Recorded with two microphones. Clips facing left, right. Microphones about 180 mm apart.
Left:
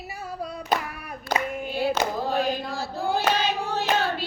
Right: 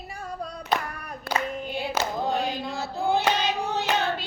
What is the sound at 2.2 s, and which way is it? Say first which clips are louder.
Hands: left 2 dB; 20° right (ahead or behind).